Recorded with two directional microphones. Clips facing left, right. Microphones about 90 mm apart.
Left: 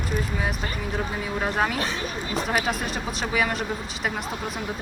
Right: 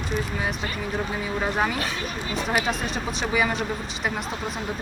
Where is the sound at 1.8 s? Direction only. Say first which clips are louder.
Left 1 dB; 35° left (ahead or behind).